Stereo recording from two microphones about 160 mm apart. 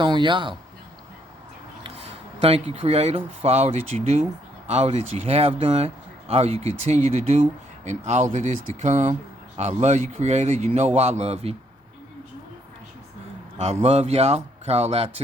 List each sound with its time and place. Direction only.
0.0 s a man's voice: 30° right (ahead or behind)
1.8 s a sound: 40° right (ahead or behind)
3.4 s a man's voice: 40° right (ahead or behind)
13.7 s speech: 45° right (ahead or behind)